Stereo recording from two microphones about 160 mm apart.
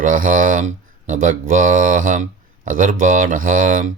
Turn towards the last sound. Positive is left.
turn(degrees=-55)  # may be behind; listen again after turning